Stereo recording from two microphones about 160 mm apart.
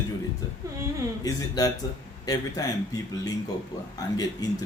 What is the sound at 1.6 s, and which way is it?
A man's voice, 25° left (ahead or behind).